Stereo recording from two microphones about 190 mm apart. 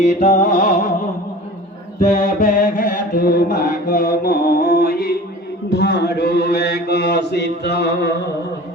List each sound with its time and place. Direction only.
0.0 s music: 40° left (ahead or behind)
2.0 s mantra: 40° left (ahead or behind); by 8.1 s 60° left (ahead or behind)